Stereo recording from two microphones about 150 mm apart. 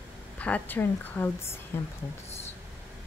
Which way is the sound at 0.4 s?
10° left (ahead or behind).